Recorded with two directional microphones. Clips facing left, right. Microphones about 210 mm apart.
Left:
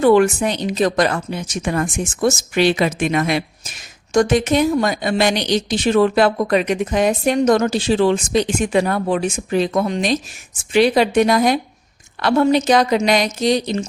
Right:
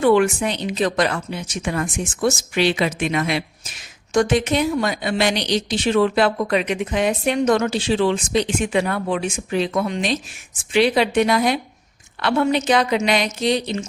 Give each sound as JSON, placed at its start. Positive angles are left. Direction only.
{"t": 0.0, "sound": "a woman's voice", "side_deg": 40}